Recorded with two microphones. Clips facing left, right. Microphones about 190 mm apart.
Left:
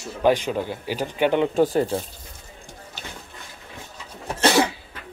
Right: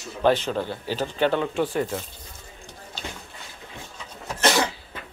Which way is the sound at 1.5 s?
40° left (ahead or behind).